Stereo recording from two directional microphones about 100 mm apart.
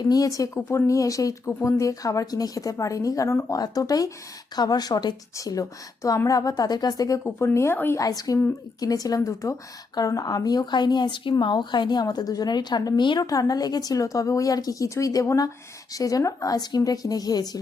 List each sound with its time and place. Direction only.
0.0 s a woman's voice: 40° left (ahead or behind)
7.3 s speech: 25° left (ahead or behind)
8.0 s a woman's voice: 40° left (ahead or behind)